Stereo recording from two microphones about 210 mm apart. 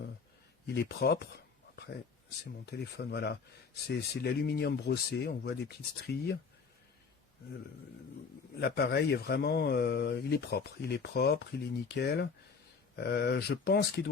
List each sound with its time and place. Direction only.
0.7 s speech: 50° left (ahead or behind)
8.5 s speech: 50° left (ahead or behind)